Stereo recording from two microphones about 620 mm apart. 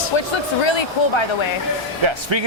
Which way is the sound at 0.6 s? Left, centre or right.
Left.